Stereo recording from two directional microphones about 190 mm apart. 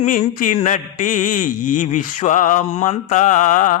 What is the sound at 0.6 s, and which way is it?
Mantra, 40° left (ahead or behind).